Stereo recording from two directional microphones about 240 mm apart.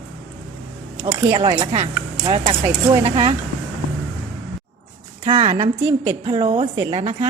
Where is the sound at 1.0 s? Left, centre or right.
Centre.